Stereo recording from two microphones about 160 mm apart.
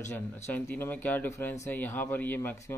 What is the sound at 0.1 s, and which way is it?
A man's voice, 15° left (ahead or behind).